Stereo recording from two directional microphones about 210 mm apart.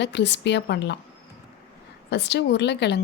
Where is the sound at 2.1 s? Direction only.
55° left (ahead or behind).